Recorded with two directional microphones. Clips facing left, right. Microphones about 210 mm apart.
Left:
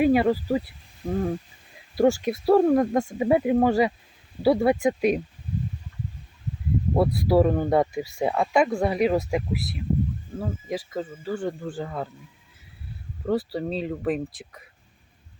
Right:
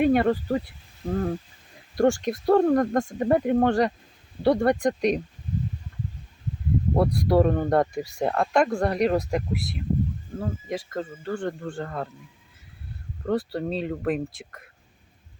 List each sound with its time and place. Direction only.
0.0 s speech: 5° left (ahead or behind)
6.9 s speech: 5° left (ahead or behind)
13.2 s speech: centre (ahead or behind)